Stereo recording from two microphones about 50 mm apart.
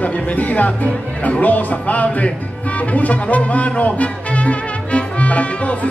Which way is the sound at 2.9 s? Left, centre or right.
Left.